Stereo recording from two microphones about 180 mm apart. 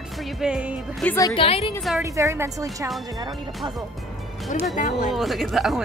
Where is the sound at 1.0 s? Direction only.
15° left (ahead or behind).